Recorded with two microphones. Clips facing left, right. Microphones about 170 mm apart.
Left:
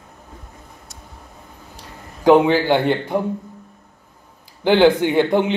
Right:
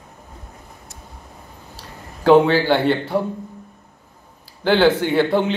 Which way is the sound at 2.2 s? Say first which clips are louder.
Even; 15° left (ahead or behind).